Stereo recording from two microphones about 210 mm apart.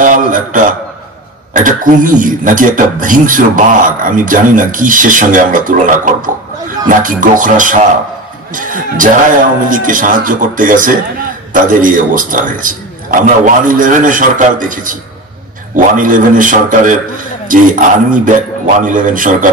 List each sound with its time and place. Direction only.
0.0 s a man's voice: 40° right (ahead or behind)